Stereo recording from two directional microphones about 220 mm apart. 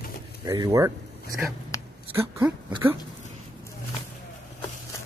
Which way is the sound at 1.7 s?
15° left (ahead or behind).